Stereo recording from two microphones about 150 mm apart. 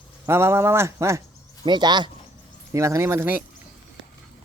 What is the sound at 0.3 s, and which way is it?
Speech, 15° right (ahead or behind).